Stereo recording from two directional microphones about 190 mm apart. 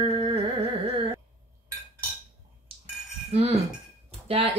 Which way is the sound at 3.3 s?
35° right (ahead or behind).